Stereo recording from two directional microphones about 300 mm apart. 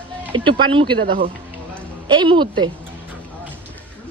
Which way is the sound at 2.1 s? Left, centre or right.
Centre.